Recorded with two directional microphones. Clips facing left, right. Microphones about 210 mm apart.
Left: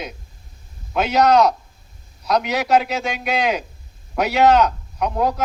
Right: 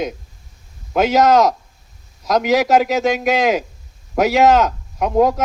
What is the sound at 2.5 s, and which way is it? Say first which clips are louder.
A man's voice: right 7 dB; 45° right (ahead or behind).